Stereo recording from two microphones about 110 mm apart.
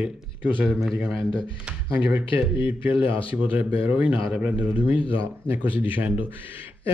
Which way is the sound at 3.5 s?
15° right (ahead or behind).